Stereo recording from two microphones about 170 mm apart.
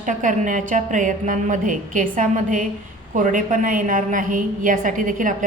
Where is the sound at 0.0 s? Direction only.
50° right (ahead or behind).